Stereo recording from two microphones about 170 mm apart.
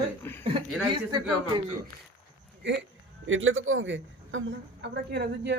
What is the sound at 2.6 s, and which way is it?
Speech, 90° right.